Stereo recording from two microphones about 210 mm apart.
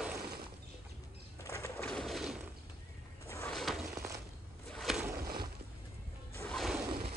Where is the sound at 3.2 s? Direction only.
10° left (ahead or behind).